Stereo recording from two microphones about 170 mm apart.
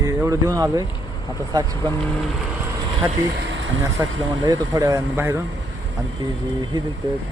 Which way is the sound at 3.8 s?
20° right (ahead or behind).